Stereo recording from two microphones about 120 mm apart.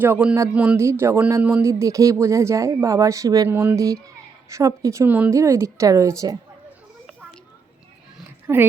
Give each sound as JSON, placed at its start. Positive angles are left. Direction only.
{"t": 0.0, "sound": "speech", "side_deg": -10}
{"t": 0.8, "sound": "speech", "side_deg": -25}
{"t": 1.8, "sound": "speech", "side_deg": -25}
{"t": 3.5, "sound": "speech", "side_deg": -20}
{"t": 5.0, "sound": "speech", "side_deg": -15}
{"t": 5.3, "sound": "speech", "side_deg": -25}
{"t": 8.5, "sound": "speech", "side_deg": -20}